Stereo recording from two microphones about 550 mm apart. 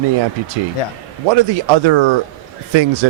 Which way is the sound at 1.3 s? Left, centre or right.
Right.